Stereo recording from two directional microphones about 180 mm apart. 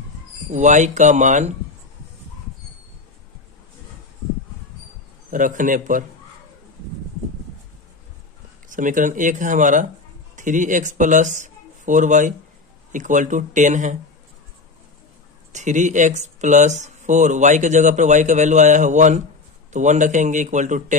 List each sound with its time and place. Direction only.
0.5 s speech: 40° right (ahead or behind)
5.3 s speech: 45° right (ahead or behind)
8.6 s speech: 45° right (ahead or behind)
15.5 s speech: 40° right (ahead or behind)